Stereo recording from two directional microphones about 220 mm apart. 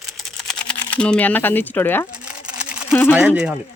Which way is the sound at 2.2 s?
5° right (ahead or behind).